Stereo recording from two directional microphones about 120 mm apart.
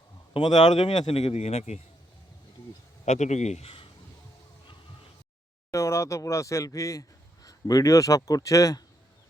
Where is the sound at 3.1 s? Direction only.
75° left (ahead or behind); by 3.9 s 50° left (ahead or behind).